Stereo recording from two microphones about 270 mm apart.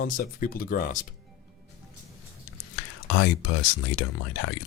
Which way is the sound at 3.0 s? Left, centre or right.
Left.